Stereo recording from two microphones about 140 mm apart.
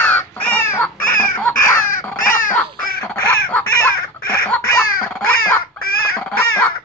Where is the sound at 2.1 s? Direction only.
90° left.